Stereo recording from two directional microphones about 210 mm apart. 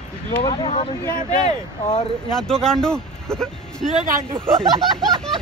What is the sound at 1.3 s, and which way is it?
Speech, 35° left (ahead or behind).